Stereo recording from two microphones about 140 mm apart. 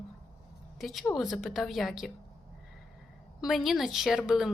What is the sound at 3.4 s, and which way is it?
Speech, centre (ahead or behind).